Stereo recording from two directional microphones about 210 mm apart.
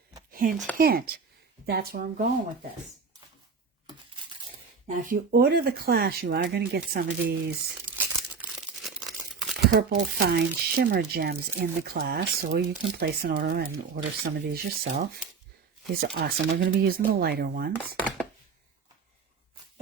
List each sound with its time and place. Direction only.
0.3 s a sound: 40° right (ahead or behind)
0.8 s speech: 45° right (ahead or behind)
4.4 s speech: 35° right (ahead or behind)
7.9 s tearing: 5° right (ahead or behind)
9.6 s speech: 50° right (ahead or behind)